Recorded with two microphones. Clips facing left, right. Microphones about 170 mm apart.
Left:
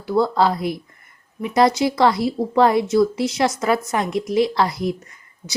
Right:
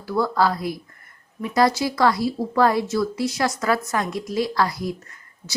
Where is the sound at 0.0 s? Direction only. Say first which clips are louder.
Left 3 dB; 25° left (ahead or behind).